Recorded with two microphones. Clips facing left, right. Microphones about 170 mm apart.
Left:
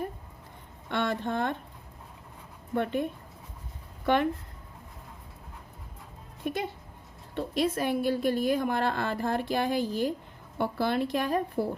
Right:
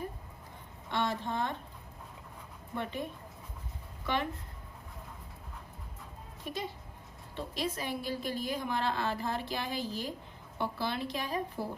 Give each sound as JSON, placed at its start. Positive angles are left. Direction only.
{"t": 0.9, "sound": "a woman's voice", "side_deg": 60}
{"t": 2.7, "sound": "a woman's voice", "side_deg": 60}
{"t": 6.4, "sound": "a woman's voice", "side_deg": 60}